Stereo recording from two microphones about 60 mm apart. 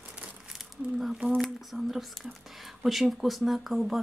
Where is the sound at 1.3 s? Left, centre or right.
Centre.